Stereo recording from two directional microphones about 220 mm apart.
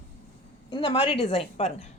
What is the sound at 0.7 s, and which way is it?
Speech, 20° left (ahead or behind).